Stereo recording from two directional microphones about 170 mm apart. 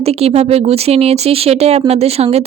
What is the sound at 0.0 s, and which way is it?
Speech, 35° right (ahead or behind).